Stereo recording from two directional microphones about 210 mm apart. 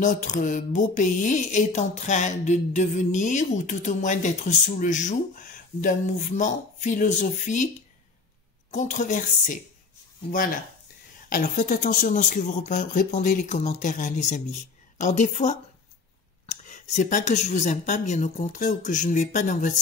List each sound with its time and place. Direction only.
0.0 s speech: 35° left (ahead or behind)
8.7 s speech: 35° left (ahead or behind)
16.4 s a sound: 35° left (ahead or behind)
16.9 s speech: 35° left (ahead or behind)